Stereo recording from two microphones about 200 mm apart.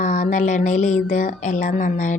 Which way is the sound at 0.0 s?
40° left (ahead or behind).